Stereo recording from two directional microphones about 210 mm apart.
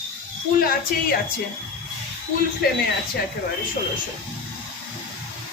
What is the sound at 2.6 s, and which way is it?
Speech, 50° left (ahead or behind).